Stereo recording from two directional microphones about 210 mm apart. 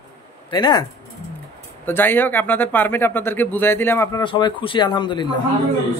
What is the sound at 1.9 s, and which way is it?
Speech, 10° left (ahead or behind).